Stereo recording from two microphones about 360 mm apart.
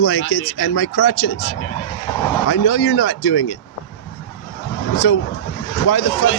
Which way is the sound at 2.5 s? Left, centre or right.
Left.